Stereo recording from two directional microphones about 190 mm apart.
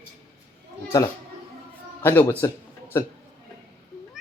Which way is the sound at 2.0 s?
10° left (ahead or behind).